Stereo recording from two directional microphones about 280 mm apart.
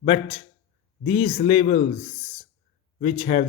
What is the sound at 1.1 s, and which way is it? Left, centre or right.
Speech, left.